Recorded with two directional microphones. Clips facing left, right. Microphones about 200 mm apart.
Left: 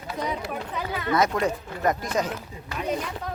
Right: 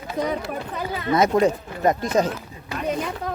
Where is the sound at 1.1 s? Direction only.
25° right (ahead or behind).